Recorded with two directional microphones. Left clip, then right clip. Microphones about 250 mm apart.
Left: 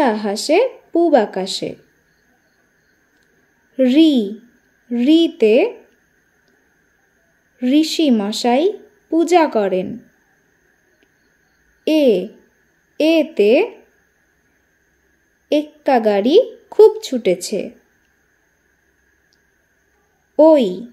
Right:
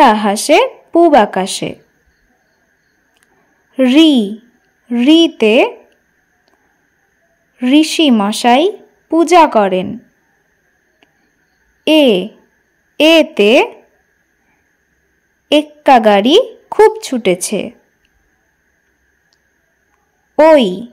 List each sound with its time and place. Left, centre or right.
0.0 s a woman's voice: right
3.7 s a woman's voice: right
7.5 s a woman's voice: right
11.8 s a woman's voice: right
15.4 s a woman's voice: right
20.5 s a woman's voice: right